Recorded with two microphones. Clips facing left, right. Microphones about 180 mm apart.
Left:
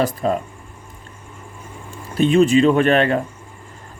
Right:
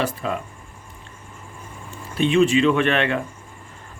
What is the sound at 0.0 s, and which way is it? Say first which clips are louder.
Speech: left 5 dB; 40° left (ahead or behind).